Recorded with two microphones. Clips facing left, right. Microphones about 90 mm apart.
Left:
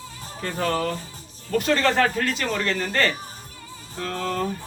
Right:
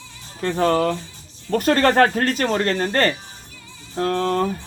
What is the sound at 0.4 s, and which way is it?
Speech, 35° right (ahead or behind).